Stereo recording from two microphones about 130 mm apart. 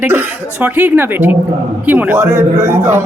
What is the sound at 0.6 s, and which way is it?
Speech, 15° right (ahead or behind).